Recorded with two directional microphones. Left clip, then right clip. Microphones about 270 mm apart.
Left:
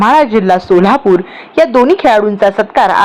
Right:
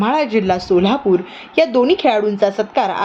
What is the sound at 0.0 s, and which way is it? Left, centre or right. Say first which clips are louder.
A woman's voice: left 8 dB; centre.